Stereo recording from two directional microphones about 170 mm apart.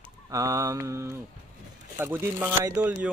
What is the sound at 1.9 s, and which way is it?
A man's voice, 10° right (ahead or behind).